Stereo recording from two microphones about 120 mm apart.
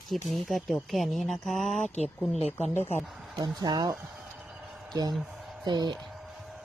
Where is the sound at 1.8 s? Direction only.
70° left (ahead or behind).